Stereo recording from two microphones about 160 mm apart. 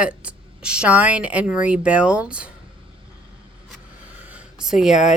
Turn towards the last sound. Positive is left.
turn(degrees=-5)  # may be behind; listen again after turning